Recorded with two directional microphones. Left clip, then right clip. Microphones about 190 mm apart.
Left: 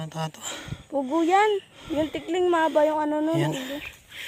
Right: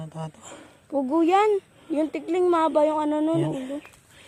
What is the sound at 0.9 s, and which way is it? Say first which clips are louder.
A woman's voice: right 1 dB; 50° right (ahead or behind).